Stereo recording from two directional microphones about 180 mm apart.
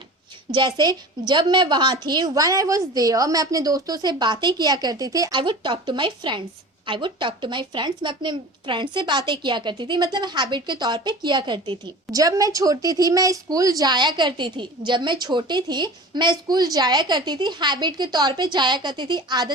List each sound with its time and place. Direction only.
0.5 s speech: 25° right (ahead or behind)